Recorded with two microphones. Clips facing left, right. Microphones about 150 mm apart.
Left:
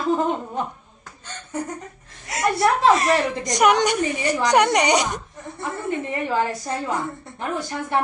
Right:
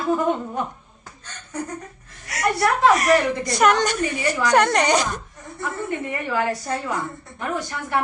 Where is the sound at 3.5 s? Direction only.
15° left (ahead or behind).